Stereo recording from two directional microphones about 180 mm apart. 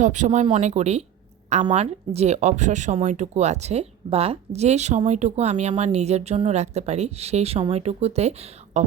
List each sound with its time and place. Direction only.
0.0 s speech: 40° right (ahead or behind)